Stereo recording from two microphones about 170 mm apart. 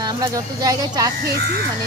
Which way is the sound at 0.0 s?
20° right (ahead or behind).